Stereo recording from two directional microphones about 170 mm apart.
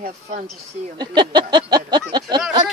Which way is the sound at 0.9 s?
25° right (ahead or behind).